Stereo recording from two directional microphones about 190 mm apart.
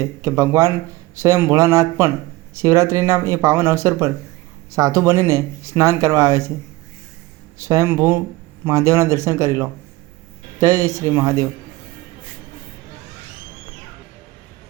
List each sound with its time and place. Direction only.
0.2 s speech: 15° right (ahead or behind)
7.6 s speech: 15° right (ahead or behind)